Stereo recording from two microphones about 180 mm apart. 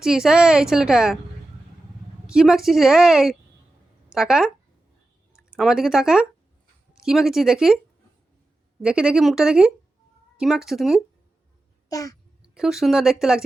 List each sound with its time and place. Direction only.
0.0 s a woman's voice: 5° right (ahead or behind)
2.2 s a woman's voice: 5° right (ahead or behind)
8.8 s a woman's voice: 5° right (ahead or behind)
11.9 s a child's voice: 20° left (ahead or behind)
12.4 s speech: 5° right (ahead or behind)